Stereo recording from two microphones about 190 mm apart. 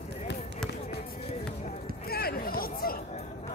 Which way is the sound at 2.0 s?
55° left (ahead or behind).